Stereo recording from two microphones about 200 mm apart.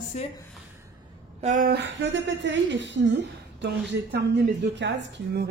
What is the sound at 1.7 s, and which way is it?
A woman's voice, 60° right (ahead or behind).